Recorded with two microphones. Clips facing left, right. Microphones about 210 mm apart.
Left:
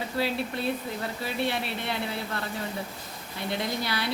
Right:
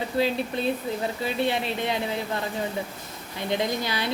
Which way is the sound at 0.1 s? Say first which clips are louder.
Right 4 dB; 20° right (ahead or behind).